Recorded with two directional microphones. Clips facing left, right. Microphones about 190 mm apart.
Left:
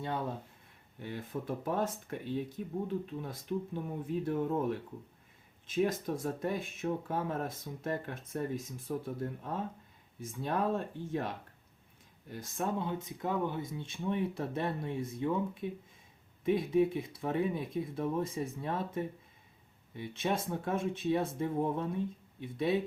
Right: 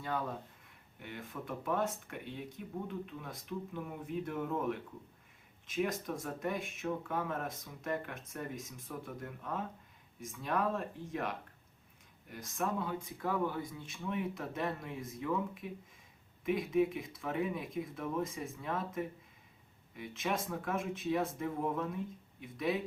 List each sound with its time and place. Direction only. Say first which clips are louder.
0.0 s speech: left 2 dB; 25° left (ahead or behind)